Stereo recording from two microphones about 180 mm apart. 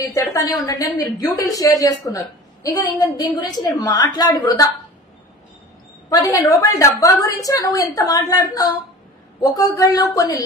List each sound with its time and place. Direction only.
0.1 s a woman's voice: 20° left (ahead or behind)
6.0 s a woman's voice: 20° left (ahead or behind)